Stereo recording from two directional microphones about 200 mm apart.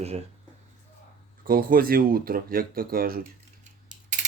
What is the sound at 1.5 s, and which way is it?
Speech, 45° right (ahead or behind).